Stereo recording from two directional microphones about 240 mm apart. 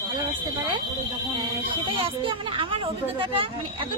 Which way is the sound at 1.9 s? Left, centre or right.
Right.